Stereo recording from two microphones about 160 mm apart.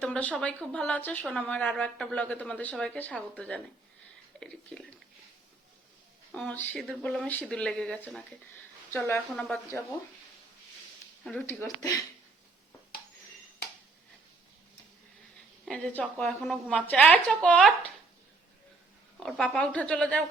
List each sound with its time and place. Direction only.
0.0 s a woman's voice: 10° left (ahead or behind)
6.3 s a woman's voice: 10° left (ahead or behind)
11.2 s speech: 5° left (ahead or behind)
11.4 s speech: 15° left (ahead or behind)
15.6 s a woman's voice: 5° left (ahead or behind)
19.2 s speech: 5° left (ahead or behind)